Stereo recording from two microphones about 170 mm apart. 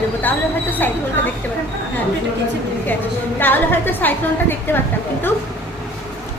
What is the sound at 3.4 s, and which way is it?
A woman's voice, 10° left (ahead or behind).